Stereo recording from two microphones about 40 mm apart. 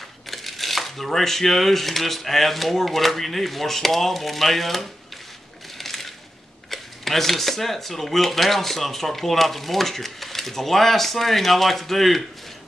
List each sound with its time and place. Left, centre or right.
0.3 s speech: centre
5.8 s crushing: centre
6.7 s speech: centre